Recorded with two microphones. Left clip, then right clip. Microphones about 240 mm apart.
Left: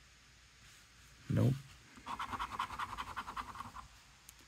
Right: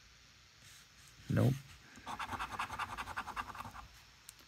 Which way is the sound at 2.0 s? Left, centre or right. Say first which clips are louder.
Even; right.